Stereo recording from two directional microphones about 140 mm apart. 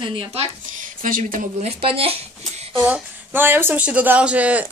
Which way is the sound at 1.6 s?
45° right (ahead or behind).